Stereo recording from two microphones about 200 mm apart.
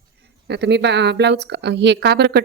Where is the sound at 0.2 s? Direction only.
60° right (ahead or behind).